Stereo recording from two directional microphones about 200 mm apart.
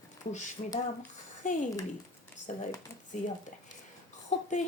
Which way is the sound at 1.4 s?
40° left (ahead or behind).